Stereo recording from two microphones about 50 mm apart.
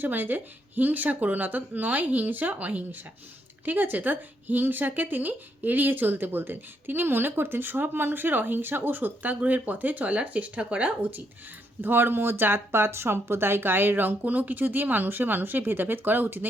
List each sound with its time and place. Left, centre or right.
0.0 s a woman's voice: right
11.8 s speech: right